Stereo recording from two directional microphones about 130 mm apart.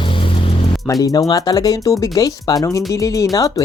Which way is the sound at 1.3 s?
30° left (ahead or behind).